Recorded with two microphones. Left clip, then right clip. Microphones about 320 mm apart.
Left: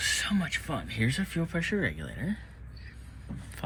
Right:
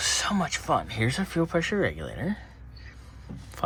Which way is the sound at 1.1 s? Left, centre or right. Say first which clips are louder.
Right 7 dB; right.